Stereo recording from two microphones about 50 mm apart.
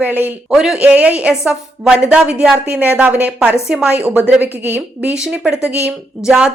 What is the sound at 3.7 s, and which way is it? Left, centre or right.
Speech, centre.